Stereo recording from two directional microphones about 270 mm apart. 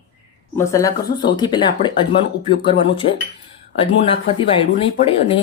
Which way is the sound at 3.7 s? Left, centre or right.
Left.